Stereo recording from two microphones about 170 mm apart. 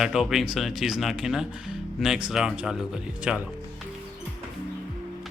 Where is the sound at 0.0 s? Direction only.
5° right (ahead or behind).